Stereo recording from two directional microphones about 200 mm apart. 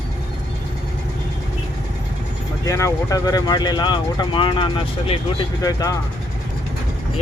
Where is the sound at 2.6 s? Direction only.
15° left (ahead or behind).